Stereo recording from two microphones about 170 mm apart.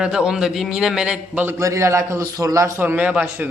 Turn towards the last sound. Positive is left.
turn(degrees=-10)  # may be behind; listen again after turning